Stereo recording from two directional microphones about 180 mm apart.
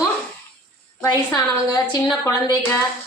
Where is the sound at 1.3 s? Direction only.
20° left (ahead or behind).